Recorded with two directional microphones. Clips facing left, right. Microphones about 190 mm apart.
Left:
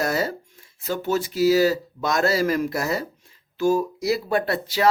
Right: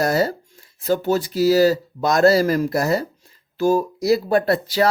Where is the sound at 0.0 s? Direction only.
35° right (ahead or behind).